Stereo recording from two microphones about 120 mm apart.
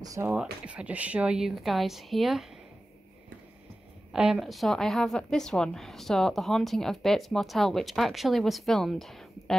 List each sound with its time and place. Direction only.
0.0 s speech: 30° right (ahead or behind)
0.3 s a woman's voice: 10° right (ahead or behind)
4.1 s a woman's voice: 5° right (ahead or behind)